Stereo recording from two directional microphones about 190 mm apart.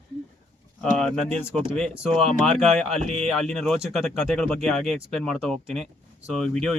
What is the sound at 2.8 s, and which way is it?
Speech, 35° right (ahead or behind).